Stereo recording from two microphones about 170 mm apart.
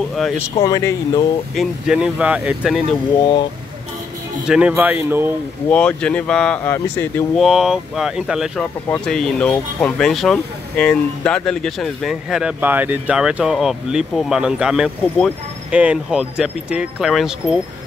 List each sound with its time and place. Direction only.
0.6 s speech: 20° left (ahead or behind)
1.5 s speech: centre (ahead or behind)
4.5 s speech: 5° right (ahead or behind)
5.7 s speech: 5° left (ahead or behind)
7.3 s speech: 5° right (ahead or behind)